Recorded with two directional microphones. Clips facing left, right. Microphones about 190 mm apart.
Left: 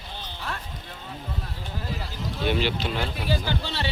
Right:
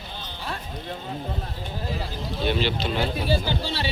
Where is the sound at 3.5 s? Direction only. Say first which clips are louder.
Right 2 dB; 15° right (ahead or behind).